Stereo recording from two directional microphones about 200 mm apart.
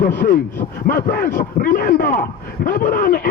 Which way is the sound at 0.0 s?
45° left (ahead or behind).